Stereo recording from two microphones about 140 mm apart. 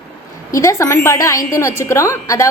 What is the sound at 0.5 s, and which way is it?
A woman's voice, 20° left (ahead or behind).